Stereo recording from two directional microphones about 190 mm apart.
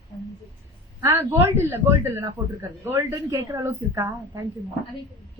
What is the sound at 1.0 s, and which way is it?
Speech, 15° right (ahead or behind).